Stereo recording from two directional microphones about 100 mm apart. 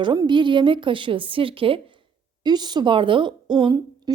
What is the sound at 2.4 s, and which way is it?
A woman's voice, 45° right (ahead or behind).